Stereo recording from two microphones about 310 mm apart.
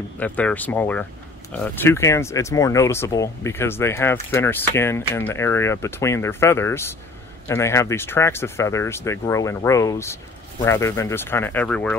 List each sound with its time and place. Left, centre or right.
0.2 s speech: centre